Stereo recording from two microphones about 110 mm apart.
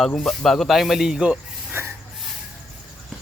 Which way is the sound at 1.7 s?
20° right (ahead or behind).